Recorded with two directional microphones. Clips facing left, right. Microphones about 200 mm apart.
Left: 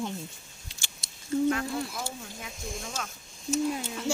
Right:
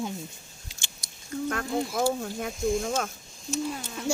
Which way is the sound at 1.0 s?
25° left (ahead or behind).